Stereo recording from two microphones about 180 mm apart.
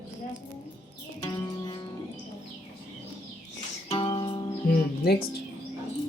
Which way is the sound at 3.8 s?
30° left (ahead or behind).